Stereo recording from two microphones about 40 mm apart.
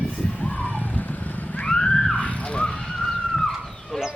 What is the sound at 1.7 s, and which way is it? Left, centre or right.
Vehicle, centre.